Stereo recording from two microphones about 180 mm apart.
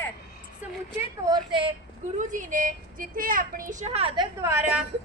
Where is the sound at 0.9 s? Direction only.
20° right (ahead or behind).